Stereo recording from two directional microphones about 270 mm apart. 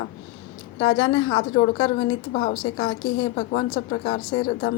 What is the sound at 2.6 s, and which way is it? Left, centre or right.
A woman's voice, left.